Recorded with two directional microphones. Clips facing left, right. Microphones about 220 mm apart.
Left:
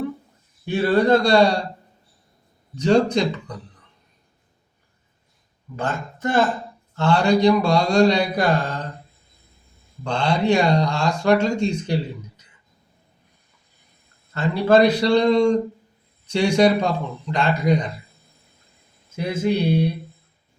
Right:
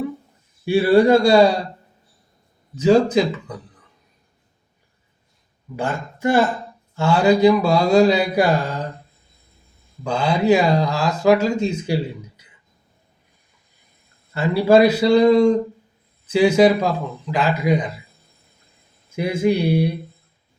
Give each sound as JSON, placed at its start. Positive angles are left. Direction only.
{"t": 0.6, "sound": "speech", "side_deg": -10}
{"t": 2.7, "sound": "a man's voice", "side_deg": -5}
{"t": 5.7, "sound": "speech", "side_deg": -10}
{"t": 10.0, "sound": "a man's voice", "side_deg": -5}
{"t": 14.3, "sound": "a man's voice", "side_deg": -10}
{"t": 19.1, "sound": "speech", "side_deg": -10}